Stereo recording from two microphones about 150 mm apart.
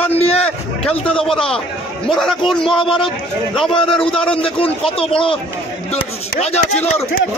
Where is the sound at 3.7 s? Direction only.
35° left (ahead or behind).